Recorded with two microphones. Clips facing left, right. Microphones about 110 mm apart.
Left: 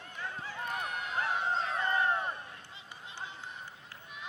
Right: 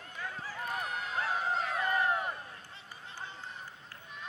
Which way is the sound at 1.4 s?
30° left (ahead or behind).